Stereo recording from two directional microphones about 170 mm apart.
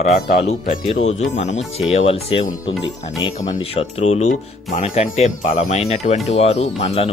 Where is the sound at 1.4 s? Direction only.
40° left (ahead or behind); by 3.5 s 25° left (ahead or behind).